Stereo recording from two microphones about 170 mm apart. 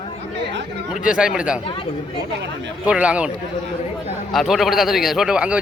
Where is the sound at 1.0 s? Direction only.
5° right (ahead or behind).